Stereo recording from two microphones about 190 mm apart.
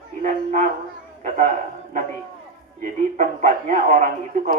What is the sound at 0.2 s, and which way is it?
A man's voice, 40° right (ahead or behind).